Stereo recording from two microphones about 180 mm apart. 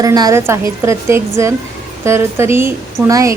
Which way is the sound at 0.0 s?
20° right (ahead or behind).